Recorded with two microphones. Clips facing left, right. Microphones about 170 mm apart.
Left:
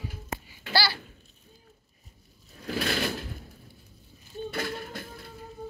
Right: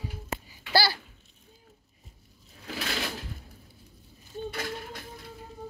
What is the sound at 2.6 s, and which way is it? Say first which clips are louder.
Sewing machine: left 5 dB; 50° left (ahead or behind).